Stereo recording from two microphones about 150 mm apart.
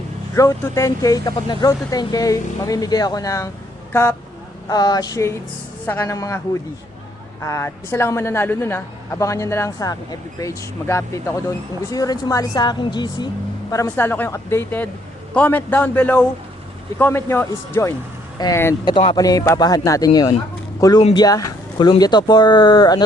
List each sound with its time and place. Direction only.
0.3 s speech: 20° left (ahead or behind)
4.7 s speech: 25° left (ahead or behind)
7.4 s speech: 20° left (ahead or behind)
21.1 s speech: 25° left (ahead or behind)